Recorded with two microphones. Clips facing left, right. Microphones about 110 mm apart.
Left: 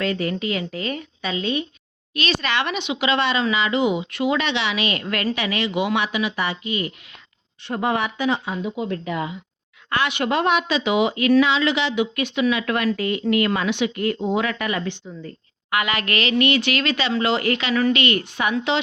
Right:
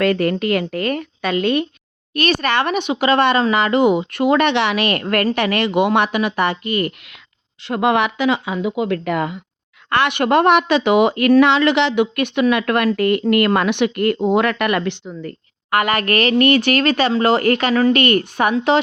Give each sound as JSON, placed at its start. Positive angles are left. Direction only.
{"t": 0.0, "sound": "speech", "side_deg": -55}
{"t": 7.6, "sound": "speech", "side_deg": -85}
{"t": 15.7, "sound": "speech", "side_deg": -45}